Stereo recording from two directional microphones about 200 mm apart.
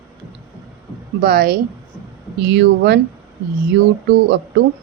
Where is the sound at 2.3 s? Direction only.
60° right (ahead or behind).